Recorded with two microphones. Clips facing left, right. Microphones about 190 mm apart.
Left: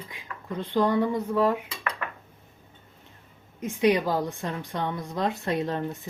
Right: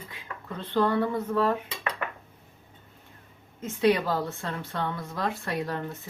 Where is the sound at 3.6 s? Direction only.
15° left (ahead or behind).